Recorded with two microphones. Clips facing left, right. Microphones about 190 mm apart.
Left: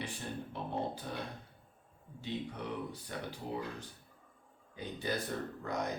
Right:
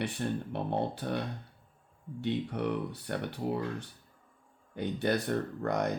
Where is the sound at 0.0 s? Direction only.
65° right (ahead or behind).